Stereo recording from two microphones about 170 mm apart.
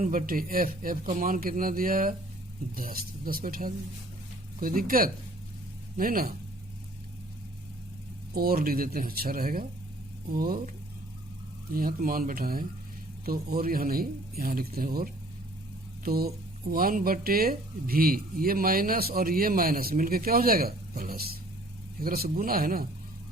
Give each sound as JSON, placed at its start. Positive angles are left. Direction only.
{"t": 0.0, "sound": "speech", "side_deg": -50}
{"t": 8.4, "sound": "speech", "side_deg": -60}
{"t": 11.7, "sound": "speech", "side_deg": -55}